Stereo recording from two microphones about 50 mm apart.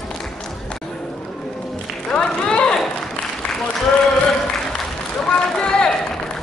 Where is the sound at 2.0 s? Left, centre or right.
Centre.